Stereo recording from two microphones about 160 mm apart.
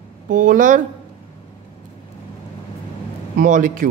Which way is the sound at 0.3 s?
55° right (ahead or behind).